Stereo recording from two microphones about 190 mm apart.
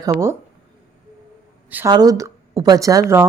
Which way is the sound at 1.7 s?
10° right (ahead or behind).